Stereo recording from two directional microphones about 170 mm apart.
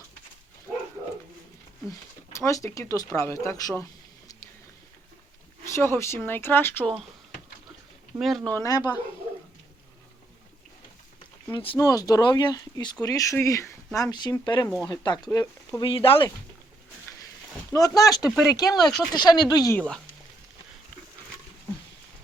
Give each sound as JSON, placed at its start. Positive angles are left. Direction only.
{"t": 1.9, "sound": "speech", "side_deg": 15}
{"t": 5.6, "sound": "speech", "side_deg": 15}
{"t": 8.2, "sound": "speech", "side_deg": 0}
{"t": 8.5, "sound": "speech", "side_deg": 20}
{"t": 11.5, "sound": "speech", "side_deg": 30}
{"t": 15.8, "sound": "speech", "side_deg": 30}
{"t": 17.7, "sound": "speech", "side_deg": 20}